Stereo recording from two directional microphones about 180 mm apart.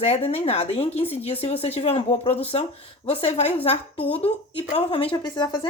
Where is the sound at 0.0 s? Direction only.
35° left (ahead or behind).